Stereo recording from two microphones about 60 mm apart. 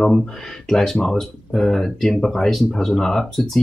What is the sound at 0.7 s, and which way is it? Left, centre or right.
Speech, centre.